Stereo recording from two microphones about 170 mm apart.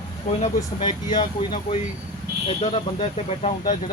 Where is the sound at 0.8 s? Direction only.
25° left (ahead or behind).